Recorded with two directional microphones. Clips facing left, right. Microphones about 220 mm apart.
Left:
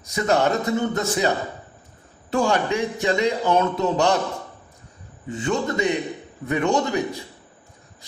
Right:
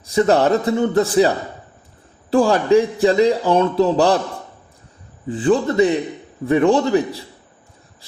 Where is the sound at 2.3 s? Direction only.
35° right (ahead or behind).